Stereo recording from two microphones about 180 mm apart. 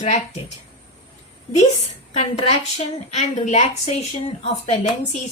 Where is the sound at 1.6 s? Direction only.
35° left (ahead or behind).